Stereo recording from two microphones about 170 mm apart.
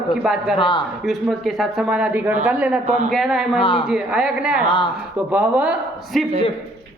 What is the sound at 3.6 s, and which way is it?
Speech, 30° left (ahead or behind).